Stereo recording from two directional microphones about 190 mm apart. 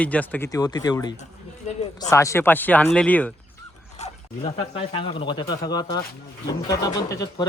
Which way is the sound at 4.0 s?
35° left (ahead or behind).